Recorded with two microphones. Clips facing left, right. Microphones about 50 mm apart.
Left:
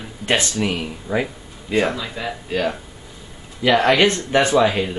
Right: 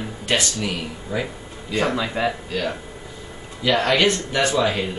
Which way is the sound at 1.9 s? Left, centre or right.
Right.